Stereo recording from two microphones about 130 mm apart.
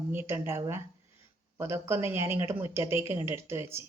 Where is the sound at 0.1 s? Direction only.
15° right (ahead or behind).